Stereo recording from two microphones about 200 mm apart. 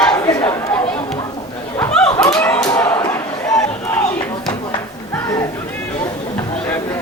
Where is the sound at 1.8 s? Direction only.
5° left (ahead or behind).